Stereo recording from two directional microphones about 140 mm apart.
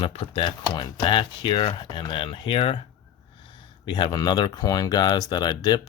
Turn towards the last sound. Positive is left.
turn(degrees=30)  # may be behind; listen again after turning